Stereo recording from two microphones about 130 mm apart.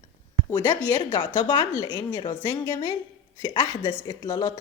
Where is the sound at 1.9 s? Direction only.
25° left (ahead or behind).